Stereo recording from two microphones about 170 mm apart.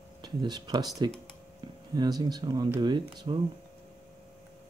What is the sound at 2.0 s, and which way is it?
Speech, 25° right (ahead or behind).